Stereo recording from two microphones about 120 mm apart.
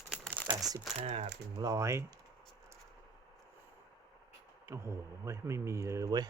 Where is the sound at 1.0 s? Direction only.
75° right (ahead or behind).